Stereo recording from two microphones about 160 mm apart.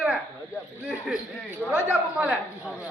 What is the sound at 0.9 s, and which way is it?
A man's voice, 5° right (ahead or behind).